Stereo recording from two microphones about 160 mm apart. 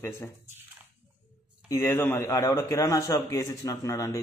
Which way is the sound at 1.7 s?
15° left (ahead or behind).